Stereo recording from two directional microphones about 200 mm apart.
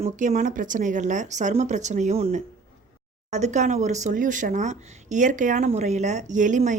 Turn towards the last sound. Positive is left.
turn(degrees=-40)  # may be behind; listen again after turning